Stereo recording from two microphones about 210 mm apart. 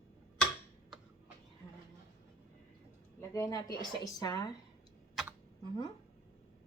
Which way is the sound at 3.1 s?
15° left (ahead or behind).